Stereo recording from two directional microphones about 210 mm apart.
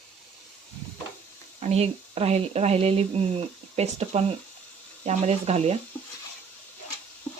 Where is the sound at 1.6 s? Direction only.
30° right (ahead or behind).